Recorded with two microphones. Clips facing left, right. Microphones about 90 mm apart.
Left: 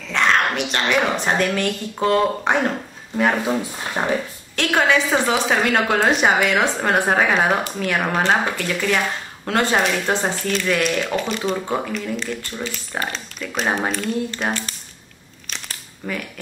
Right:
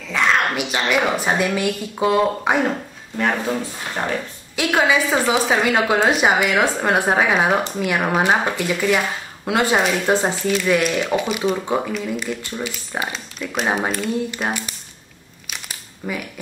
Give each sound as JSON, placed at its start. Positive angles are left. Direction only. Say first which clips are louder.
{"t": 0.1, "sound": "a woman's voice", "louder": "even", "side_deg": -5}
{"t": 3.2, "sound": "speech", "louder": "left 2 dB", "side_deg": 5}
{"t": 4.0, "sound": "speech", "louder": "left 2 dB", "side_deg": 20}
{"t": 4.6, "sound": "a woman's voice", "louder": "even", "side_deg": -5}
{"t": 15.4, "sound": "a sound", "louder": "even", "side_deg": -10}